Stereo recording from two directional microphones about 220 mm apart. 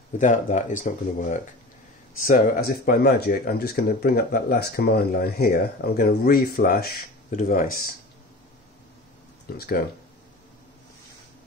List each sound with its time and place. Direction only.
0.2 s speech: 35° left (ahead or behind)
9.6 s speech: 45° left (ahead or behind)